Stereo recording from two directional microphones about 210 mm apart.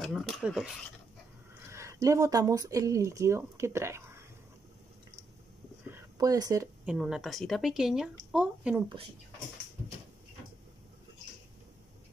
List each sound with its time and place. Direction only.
0.0 s speech: centre (ahead or behind)
1.7 s speech: 15° right (ahead or behind)
5.9 s a sound: 15° right (ahead or behind)
7.0 s speech: 5° right (ahead or behind)
8.8 s speech: 25° right (ahead or behind)